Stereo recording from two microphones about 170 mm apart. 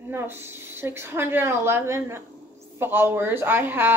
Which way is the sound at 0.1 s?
15° right (ahead or behind).